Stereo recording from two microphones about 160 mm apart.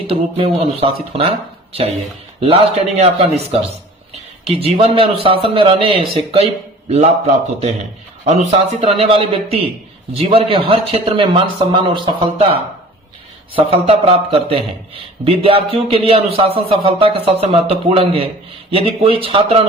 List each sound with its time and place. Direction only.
0.1 s a man's voice: 35° right (ahead or behind)
3.0 s a man's voice: 40° right (ahead or behind)